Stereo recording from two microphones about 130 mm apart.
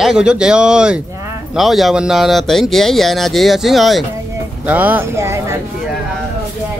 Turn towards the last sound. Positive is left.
turn(degrees=-20)  # may be behind; listen again after turning